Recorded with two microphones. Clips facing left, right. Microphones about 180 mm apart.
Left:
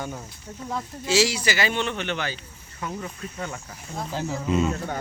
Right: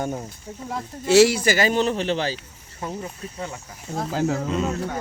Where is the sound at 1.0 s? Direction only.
60° right (ahead or behind); by 3.6 s 25° right (ahead or behind).